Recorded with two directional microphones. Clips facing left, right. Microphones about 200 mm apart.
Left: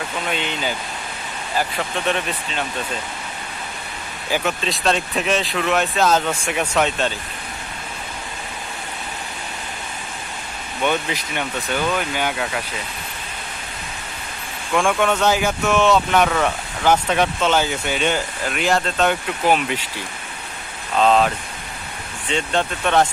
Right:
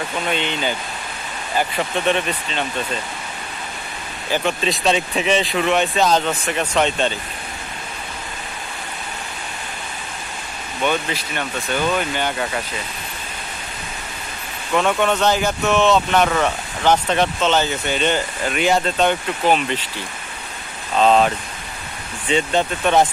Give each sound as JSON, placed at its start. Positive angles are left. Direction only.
{"t": 0.3, "sound": "speech", "side_deg": 5}
{"t": 4.3, "sound": "speech", "side_deg": 0}
{"t": 10.8, "sound": "speech", "side_deg": 15}
{"t": 11.9, "sound": "speech", "side_deg": 5}
{"t": 14.7, "sound": "speech", "side_deg": -5}
{"t": 21.0, "sound": "speech", "side_deg": 0}
{"t": 22.3, "sound": "speech", "side_deg": -5}